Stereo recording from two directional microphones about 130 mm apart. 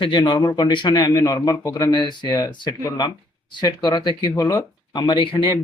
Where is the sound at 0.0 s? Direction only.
40° left (ahead or behind).